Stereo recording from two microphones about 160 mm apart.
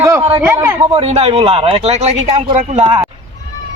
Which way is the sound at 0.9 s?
40° right (ahead or behind).